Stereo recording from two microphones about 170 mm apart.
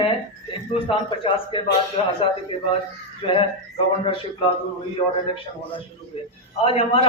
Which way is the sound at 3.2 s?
35° left (ahead or behind).